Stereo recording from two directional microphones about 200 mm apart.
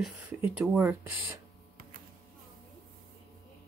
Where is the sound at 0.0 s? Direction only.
5° right (ahead or behind).